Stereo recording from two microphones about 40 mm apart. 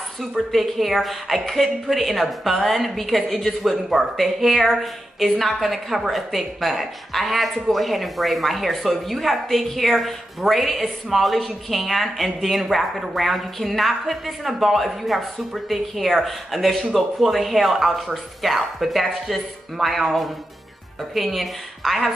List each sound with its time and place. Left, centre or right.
0.5 s speech: centre